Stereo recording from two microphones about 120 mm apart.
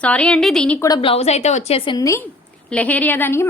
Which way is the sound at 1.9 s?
25° left (ahead or behind).